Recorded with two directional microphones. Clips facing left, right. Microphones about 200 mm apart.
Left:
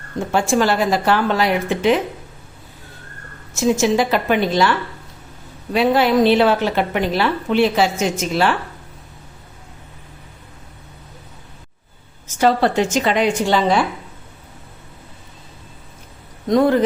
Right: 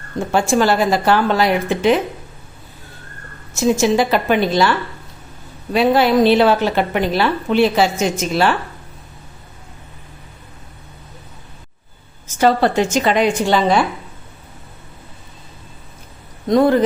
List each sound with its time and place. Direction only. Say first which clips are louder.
0.3 s a woman's voice: right 2 dB; 35° right (ahead or behind)
3.5 s a woman's voice: right 1 dB; 35° right (ahead or behind)
5.7 s a woman's voice: right 1 dB; 35° right (ahead or behind)
12.4 s a woman's voice: right 1 dB; 45° right (ahead or behind)
16.5 s a woman's voice: right 1 dB; 35° right (ahead or behind)